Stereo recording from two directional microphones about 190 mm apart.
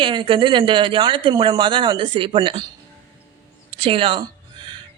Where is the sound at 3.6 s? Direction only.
30° right (ahead or behind).